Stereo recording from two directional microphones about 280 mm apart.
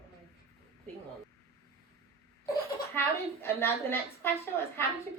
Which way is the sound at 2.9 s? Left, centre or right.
Centre.